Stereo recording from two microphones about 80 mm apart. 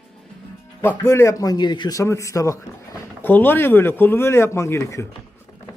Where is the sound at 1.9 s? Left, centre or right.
Left.